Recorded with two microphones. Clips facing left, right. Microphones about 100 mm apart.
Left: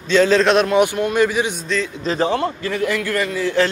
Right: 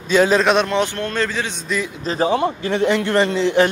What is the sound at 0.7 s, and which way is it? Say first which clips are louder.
Speech: left 4 dB; 10° left (ahead or behind).